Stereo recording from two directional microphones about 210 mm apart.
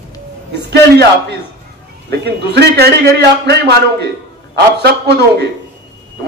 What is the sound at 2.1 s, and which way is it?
A man's voice, 50° right (ahead or behind).